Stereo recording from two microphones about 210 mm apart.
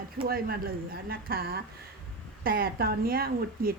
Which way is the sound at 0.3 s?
45° right (ahead or behind).